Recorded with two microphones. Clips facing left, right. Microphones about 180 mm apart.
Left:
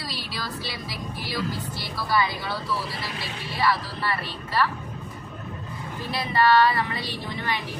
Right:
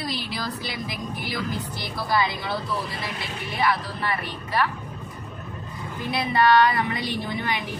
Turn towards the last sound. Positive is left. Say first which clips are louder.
# right 3 dB
turn(degrees=-15)  # may be behind; listen again after turning